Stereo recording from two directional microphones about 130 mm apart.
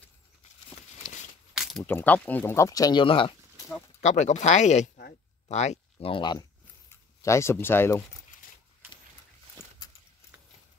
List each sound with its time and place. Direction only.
0.7 s a sound: 65° left (ahead or behind)
1.5 s a sound: 5° right (ahead or behind)
1.8 s speech: 15° left (ahead or behind)
3.0 s speech: 40° left (ahead or behind)
4.0 s speech: 60° left (ahead or behind); by 6.4 s 40° left (ahead or behind)
6.9 s speech: 20° left (ahead or behind)